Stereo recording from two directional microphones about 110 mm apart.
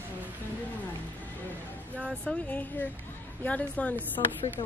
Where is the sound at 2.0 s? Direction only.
10° left (ahead or behind).